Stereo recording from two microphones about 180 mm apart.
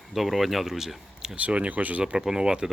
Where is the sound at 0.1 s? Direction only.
Centre (ahead or behind).